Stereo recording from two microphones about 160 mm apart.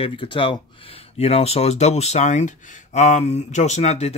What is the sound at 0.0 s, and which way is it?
Speech, 30° left (ahead or behind).